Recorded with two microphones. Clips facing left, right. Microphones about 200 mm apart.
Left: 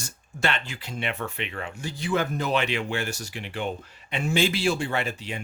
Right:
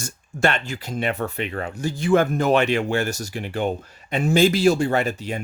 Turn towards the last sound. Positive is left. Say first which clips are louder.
# right 6 dB
turn(degrees=-45)  # may be behind; listen again after turning